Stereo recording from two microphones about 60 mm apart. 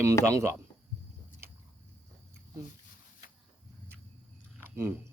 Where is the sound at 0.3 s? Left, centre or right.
Right.